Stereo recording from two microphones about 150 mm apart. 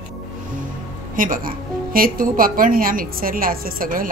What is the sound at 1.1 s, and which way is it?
A woman's voice, 65° right (ahead or behind).